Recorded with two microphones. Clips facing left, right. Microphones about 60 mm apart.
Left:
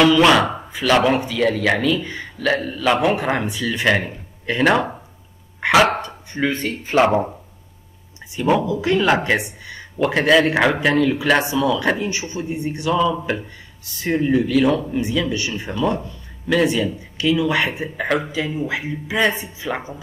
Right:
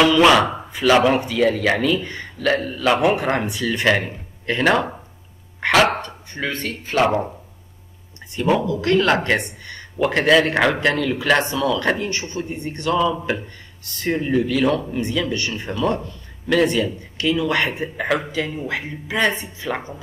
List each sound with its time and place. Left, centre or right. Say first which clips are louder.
0.0 s speech: even; centre; by 7.2 s left
8.4 s speech: left 1 dB; centre
13.0 s speech: left 1 dB; centre